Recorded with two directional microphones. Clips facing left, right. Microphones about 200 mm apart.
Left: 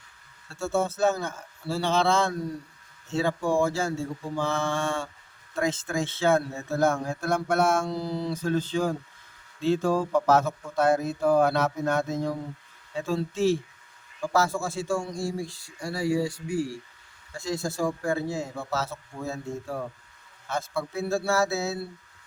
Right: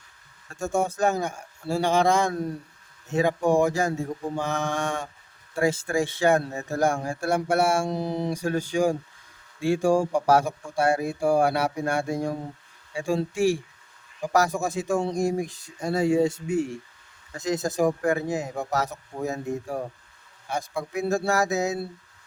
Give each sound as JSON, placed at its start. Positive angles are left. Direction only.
{"t": 0.4, "sound": "mantra", "side_deg": -15}
{"t": 7.9, "sound": "mantra", "side_deg": -20}
{"t": 12.9, "sound": "speech", "side_deg": -10}
{"t": 13.3, "sound": "mantra", "side_deg": -15}
{"t": 15.1, "sound": "speech", "side_deg": -20}
{"t": 18.7, "sound": "mantra", "side_deg": -15}